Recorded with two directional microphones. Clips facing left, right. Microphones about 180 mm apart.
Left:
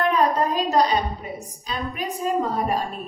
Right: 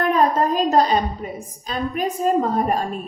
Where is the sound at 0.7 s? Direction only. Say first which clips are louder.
Right 3 dB; 45° right (ahead or behind).